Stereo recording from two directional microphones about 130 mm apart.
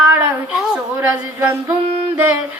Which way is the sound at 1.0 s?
15° right (ahead or behind).